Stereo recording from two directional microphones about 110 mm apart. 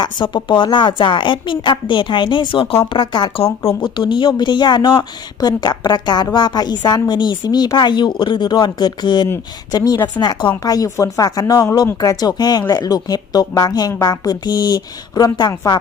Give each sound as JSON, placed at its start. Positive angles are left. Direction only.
{"t": 0.0, "sound": "a woman's voice", "side_deg": 45}
{"t": 10.6, "sound": "speech", "side_deg": 30}